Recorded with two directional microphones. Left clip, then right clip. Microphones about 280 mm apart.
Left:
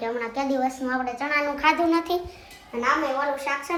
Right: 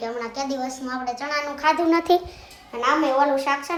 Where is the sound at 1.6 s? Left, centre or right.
Right.